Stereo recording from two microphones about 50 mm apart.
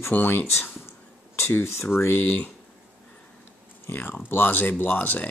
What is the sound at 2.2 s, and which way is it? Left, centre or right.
Speech, left.